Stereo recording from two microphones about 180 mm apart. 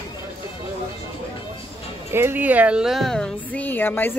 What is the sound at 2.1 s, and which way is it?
Speech, 15° right (ahead or behind).